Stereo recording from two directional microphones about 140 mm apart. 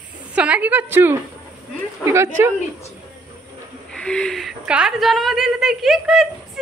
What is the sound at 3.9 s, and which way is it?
A woman's voice, 5° left (ahead or behind).